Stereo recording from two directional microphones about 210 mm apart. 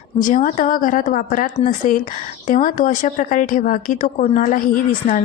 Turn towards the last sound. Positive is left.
turn(degrees=35)  # may be behind; listen again after turning